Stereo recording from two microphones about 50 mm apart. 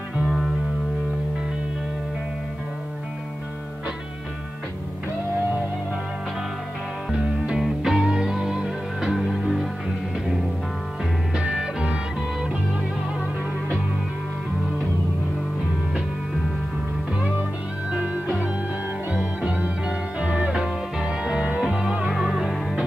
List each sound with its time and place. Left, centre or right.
7.1 s music: centre
11.3 s music: centre
19.9 s music: right; by 22.8 s centre